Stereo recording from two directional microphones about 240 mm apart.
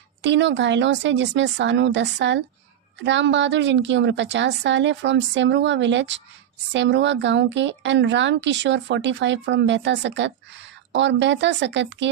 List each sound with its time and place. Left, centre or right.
0.2 s a woman's voice: right